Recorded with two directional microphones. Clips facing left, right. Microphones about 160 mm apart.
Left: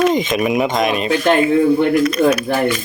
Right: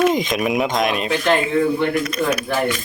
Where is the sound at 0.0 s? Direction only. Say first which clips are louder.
Left 2 dB; centre (ahead or behind).